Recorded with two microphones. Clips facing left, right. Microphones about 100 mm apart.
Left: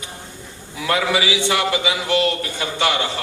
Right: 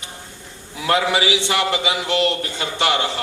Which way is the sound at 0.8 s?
25° right (ahead or behind).